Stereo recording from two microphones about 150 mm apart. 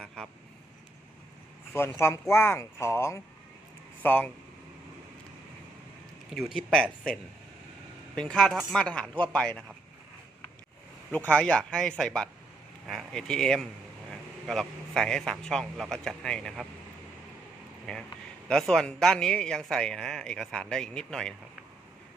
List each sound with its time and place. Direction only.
0.2 s vehicle: 5° left (ahead or behind)
1.7 s speech: 15° left (ahead or behind)
6.3 s a man's voice: centre (ahead or behind)
8.1 s a man's voice: 5° left (ahead or behind)
11.1 s a man's voice: 10° left (ahead or behind)
17.9 s a man's voice: 5° left (ahead or behind)